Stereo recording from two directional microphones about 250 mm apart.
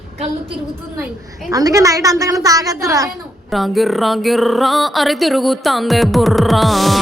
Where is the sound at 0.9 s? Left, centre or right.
Centre.